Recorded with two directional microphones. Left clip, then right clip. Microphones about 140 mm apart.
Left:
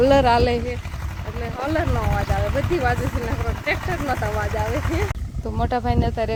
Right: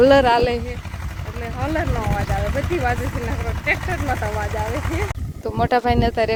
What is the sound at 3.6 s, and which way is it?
Speech, 15° left (ahead or behind).